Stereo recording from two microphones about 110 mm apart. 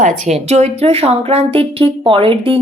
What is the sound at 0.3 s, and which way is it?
Speech, 80° right.